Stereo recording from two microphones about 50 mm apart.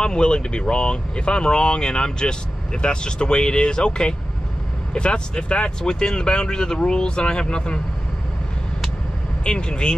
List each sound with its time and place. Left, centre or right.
0.0 s speech: centre
9.4 s speech: centre